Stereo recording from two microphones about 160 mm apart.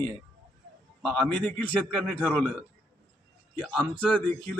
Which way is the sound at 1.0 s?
5° left (ahead or behind).